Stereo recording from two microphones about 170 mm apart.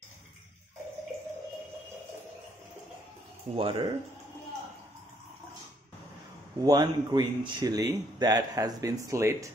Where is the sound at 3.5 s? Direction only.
30° right (ahead or behind).